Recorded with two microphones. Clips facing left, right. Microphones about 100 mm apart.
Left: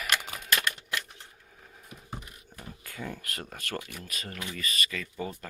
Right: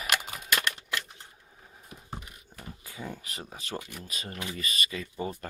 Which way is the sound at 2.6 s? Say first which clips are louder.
Left 1 dB; 10° right (ahead or behind).